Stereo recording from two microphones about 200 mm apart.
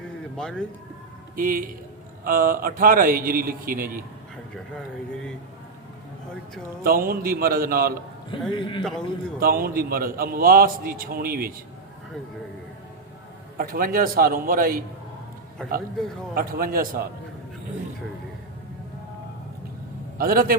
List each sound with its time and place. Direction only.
0.0 s bird: 5° left (ahead or behind)
1.4 s a man's voice: 45° right (ahead or behind)
4.5 s speech: 5° left (ahead or behind)
6.8 s a man's voice: 45° right (ahead or behind)
8.3 s a man's voice: 25° left (ahead or behind)
8.8 s speech: 5° left (ahead or behind)
9.4 s a man's voice: 45° right (ahead or behind)
13.6 s a man's voice: 45° right (ahead or behind)
16.3 s a man's voice: 45° right (ahead or behind)
20.1 s a man's voice: 45° right (ahead or behind)